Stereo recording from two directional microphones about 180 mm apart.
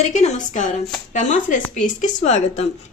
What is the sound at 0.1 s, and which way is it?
A woman's voice, 40° left (ahead or behind).